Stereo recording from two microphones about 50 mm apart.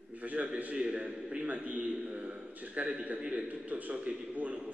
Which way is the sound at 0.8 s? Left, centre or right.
Right.